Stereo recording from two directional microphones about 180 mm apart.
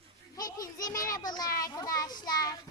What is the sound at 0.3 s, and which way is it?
Children playing, 20° left (ahead or behind).